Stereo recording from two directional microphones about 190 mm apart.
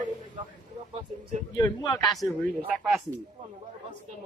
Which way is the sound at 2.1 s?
Centre (ahead or behind).